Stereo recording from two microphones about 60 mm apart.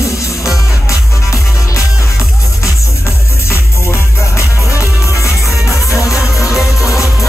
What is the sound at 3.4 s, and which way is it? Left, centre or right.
Music, left.